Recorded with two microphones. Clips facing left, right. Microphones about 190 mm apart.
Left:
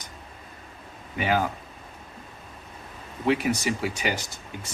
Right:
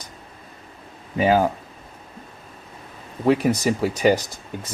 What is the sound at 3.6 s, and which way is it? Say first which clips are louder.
Speech: right 8 dB; 40° right (ahead or behind).